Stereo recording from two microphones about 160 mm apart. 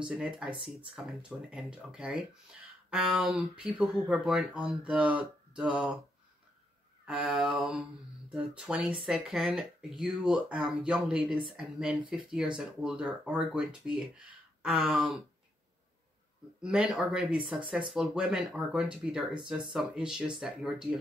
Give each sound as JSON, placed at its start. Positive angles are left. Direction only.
{"t": 0.0, "sound": "speech", "side_deg": -5}
{"t": 7.1, "sound": "speech", "side_deg": -5}
{"t": 16.6, "sound": "speech", "side_deg": -5}